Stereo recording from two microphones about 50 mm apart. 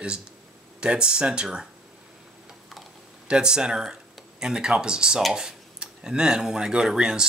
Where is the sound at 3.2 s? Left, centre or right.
Centre.